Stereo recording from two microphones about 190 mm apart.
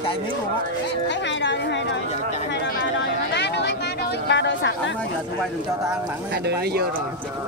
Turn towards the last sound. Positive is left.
turn(degrees=-60)  # may be behind; listen again after turning